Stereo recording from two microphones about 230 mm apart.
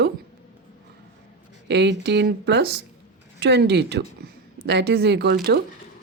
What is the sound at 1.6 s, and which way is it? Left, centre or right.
Speech, right.